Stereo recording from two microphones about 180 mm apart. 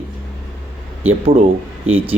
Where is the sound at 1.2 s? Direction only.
35° right (ahead or behind).